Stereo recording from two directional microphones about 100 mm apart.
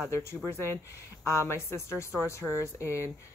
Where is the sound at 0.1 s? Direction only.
25° left (ahead or behind).